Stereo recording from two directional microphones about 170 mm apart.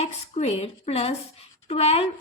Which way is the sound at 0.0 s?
40° left (ahead or behind).